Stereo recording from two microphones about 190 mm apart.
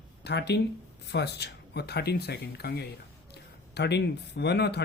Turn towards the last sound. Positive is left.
turn(degrees=60)  # may be behind; listen again after turning